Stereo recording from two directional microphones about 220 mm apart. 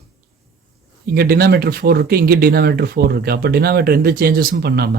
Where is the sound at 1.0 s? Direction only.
45° right (ahead or behind).